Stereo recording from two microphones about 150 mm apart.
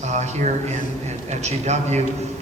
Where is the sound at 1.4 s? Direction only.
45° right (ahead or behind).